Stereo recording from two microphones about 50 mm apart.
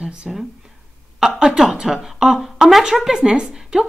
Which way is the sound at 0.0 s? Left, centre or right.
Centre.